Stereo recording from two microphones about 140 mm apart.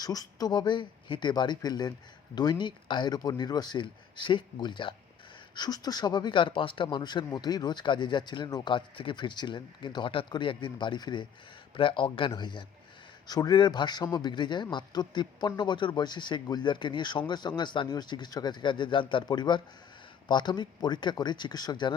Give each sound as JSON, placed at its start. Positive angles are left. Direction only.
{"t": 0.0, "sound": "speech", "side_deg": 25}